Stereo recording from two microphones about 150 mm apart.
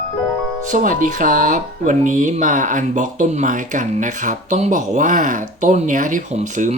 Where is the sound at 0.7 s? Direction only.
60° right (ahead or behind).